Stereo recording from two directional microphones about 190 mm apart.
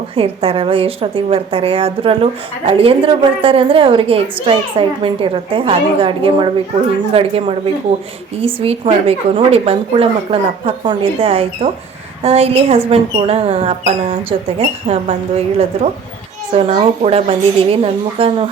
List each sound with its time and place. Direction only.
0.2 s a woman's voice: 30° right (ahead or behind)
16.6 s a woman's voice: 30° right (ahead or behind)